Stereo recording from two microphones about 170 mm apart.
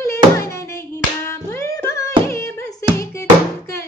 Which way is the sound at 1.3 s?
15° left (ahead or behind).